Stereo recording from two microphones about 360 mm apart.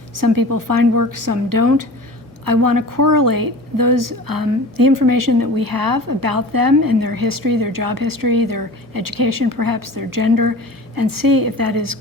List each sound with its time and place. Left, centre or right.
0.2 s a woman's voice: right